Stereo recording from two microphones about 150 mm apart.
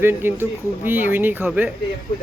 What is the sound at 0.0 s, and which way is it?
Speech, 15° right (ahead or behind).